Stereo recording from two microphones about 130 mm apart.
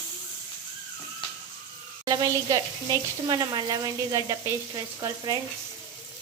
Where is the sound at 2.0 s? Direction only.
25° right (ahead or behind).